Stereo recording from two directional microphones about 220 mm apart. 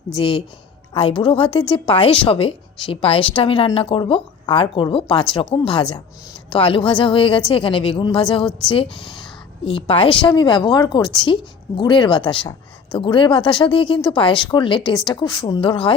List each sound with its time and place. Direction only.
0.2 s a woman's voice: 25° left (ahead or behind)